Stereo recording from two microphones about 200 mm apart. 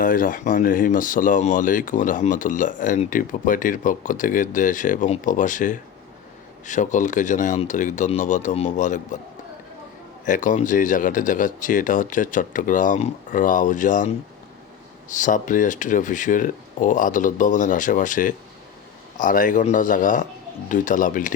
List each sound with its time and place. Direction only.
0.0 s speech: 45° left (ahead or behind)
10.2 s speech: 40° left (ahead or behind)
15.1 s speech: 40° left (ahead or behind)